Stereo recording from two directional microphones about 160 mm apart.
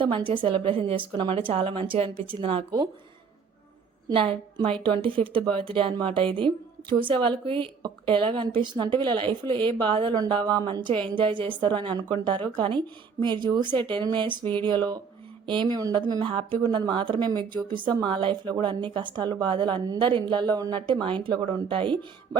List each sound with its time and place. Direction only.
0.0 s speech: 30° right (ahead or behind)
4.1 s speech: 35° right (ahead or behind)
22.3 s music: 20° right (ahead or behind)